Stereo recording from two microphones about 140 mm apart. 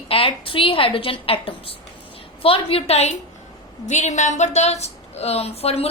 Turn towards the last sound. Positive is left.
turn(degrees=45)  # may be behind; listen again after turning